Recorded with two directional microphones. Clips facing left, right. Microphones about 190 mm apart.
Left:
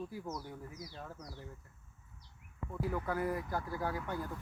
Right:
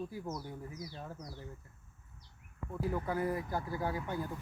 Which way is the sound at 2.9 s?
20° right (ahead or behind).